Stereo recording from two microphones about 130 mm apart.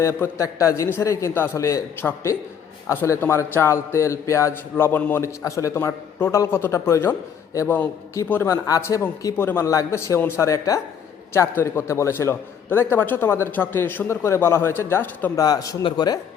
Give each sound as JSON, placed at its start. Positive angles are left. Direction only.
{"t": 0.0, "sound": "a man's voice", "side_deg": 20}
{"t": 15.4, "sound": "a man's voice", "side_deg": 30}